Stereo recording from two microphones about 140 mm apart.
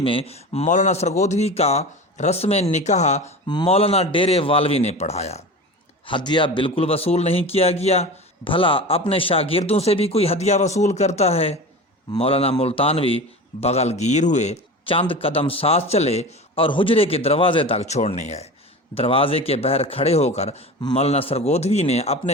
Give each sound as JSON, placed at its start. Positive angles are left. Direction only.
{"t": 0.0, "sound": "speech", "side_deg": 40}
{"t": 3.4, "sound": "speech", "side_deg": 30}
{"t": 3.7, "sound": "speech", "side_deg": 45}
{"t": 6.1, "sound": "speech", "side_deg": 35}
{"t": 15.1, "sound": "speech", "side_deg": 45}
{"t": 18.9, "sound": "speech", "side_deg": 40}